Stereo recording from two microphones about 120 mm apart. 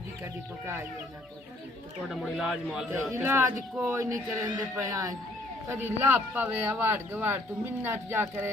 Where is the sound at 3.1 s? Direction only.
25° right (ahead or behind).